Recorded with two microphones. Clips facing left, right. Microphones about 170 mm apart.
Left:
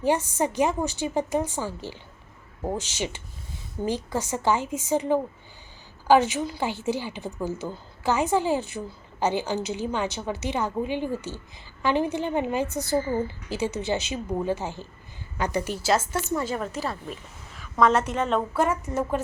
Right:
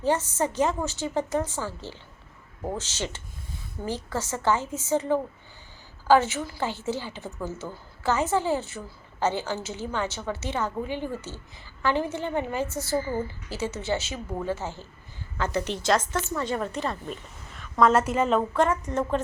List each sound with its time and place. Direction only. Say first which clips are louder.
0.0 s a woman's voice: left 1 dB; 15° left (ahead or behind)
16.5 s a woman's voice: right 1 dB; centre (ahead or behind)
18.5 s a woman's voice: right 1 dB; 5° left (ahead or behind)